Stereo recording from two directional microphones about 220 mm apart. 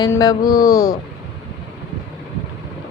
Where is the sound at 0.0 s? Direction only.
15° left (ahead or behind).